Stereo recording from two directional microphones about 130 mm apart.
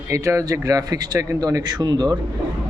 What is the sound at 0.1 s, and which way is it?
Speech, 25° right (ahead or behind).